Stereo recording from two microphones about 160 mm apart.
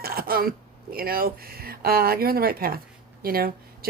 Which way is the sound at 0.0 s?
70° right (ahead or behind).